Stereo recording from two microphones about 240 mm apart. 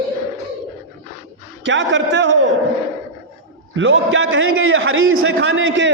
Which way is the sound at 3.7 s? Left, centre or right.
Right.